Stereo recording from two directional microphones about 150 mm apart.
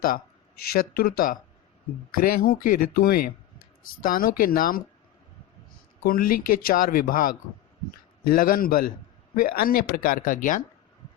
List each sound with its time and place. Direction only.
0.7 s speech: 85° left
6.1 s speech: 75° left (ahead or behind); by 10.6 s 60° left (ahead or behind)